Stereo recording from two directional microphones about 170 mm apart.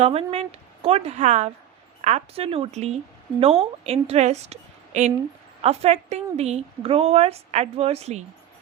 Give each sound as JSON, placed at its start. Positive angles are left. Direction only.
{"t": 0.0, "sound": "a woman's voice", "side_deg": -35}